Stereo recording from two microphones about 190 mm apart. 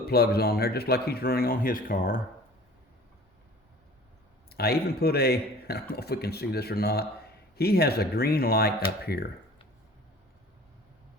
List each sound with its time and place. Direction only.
0.0 s speech: 55° left (ahead or behind)
4.4 s speech: 55° left (ahead or behind)